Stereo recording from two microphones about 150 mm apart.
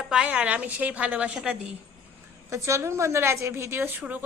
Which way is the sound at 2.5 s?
20° right (ahead or behind).